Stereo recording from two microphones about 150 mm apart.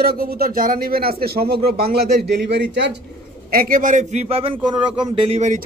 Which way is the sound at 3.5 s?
75° right (ahead or behind).